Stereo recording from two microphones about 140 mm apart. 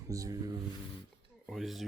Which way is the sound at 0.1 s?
25° right (ahead or behind).